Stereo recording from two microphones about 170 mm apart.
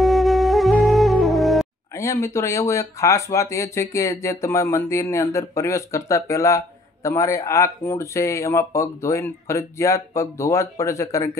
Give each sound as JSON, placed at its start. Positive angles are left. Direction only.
{"t": 0.0, "sound": "music", "side_deg": 0}
{"t": 2.0, "sound": "speech", "side_deg": 15}